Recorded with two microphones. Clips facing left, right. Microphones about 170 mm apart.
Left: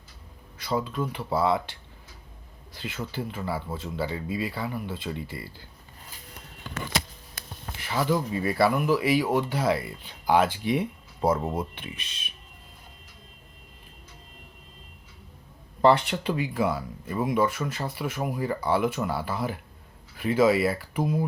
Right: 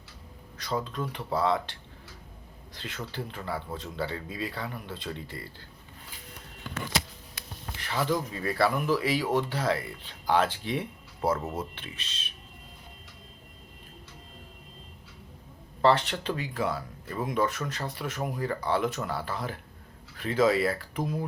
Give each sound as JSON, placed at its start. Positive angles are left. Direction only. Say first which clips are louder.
{"t": 0.6, "sound": "speech", "louder": "left 4 dB", "side_deg": 10}
{"t": 2.7, "sound": "speech", "louder": "left 4 dB", "side_deg": 5}
{"t": 7.4, "sound": "a sound", "louder": "left 2 dB", "side_deg": 45}
{"t": 7.8, "sound": "speech", "louder": "left 3 dB", "side_deg": 10}
{"t": 15.8, "sound": "speech", "louder": "left 3 dB", "side_deg": 10}